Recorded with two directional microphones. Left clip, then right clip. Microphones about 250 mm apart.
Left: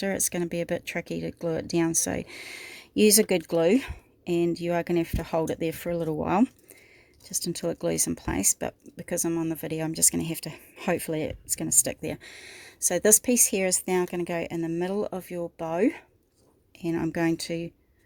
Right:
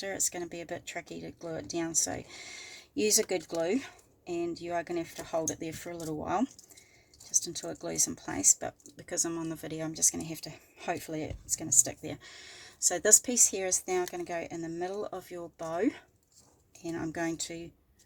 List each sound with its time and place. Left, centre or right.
0.0 s speech: left